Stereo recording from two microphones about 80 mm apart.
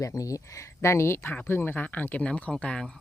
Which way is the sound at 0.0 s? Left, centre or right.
Left.